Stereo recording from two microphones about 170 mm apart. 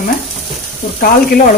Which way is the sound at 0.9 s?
60° left (ahead or behind).